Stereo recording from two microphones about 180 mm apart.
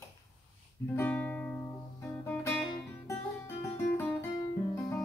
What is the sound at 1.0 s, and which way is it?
Music, 10° left (ahead or behind).